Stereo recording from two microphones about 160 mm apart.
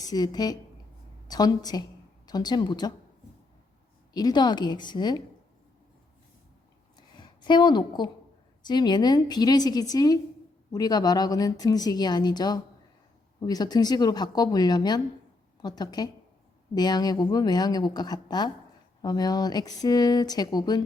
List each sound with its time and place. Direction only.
0.0 s a woman's voice: 25° left (ahead or behind)
4.1 s a woman's voice: 25° left (ahead or behind)
6.9 s a sound: 30° left (ahead or behind)
8.6 s a woman's voice: 25° left (ahead or behind)